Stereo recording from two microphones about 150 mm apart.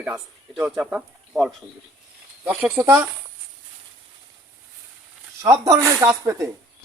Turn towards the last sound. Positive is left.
turn(degrees=-20)  # may be behind; listen again after turning